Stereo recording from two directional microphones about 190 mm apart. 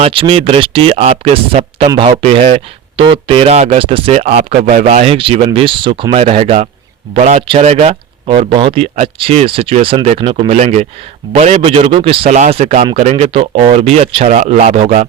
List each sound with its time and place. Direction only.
0.0 s speech: 30° right (ahead or behind)